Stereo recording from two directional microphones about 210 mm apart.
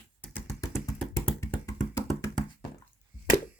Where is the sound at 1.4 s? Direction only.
15° left (ahead or behind).